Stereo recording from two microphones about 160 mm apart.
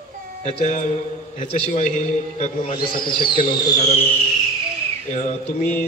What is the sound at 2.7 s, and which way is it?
Speech, 30° left (ahead or behind).